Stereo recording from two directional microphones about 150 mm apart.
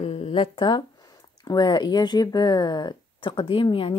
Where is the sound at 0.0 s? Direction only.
40° left (ahead or behind).